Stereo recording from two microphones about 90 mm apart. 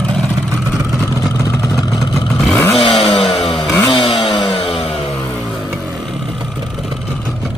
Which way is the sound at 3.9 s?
65° left (ahead or behind).